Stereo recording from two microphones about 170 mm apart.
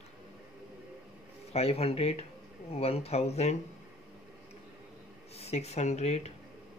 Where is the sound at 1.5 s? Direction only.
35° left (ahead or behind).